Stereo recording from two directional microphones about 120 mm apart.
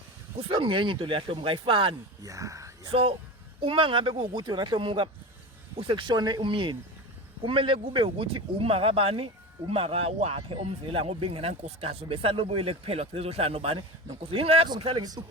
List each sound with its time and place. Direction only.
0.3 s speech: 45° right (ahead or behind)
2.2 s speech: 25° right (ahead or behind)
2.9 s speech: 50° right (ahead or behind)